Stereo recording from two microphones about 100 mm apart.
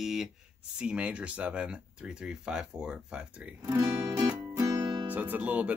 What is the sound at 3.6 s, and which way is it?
Speech, 25° right (ahead or behind).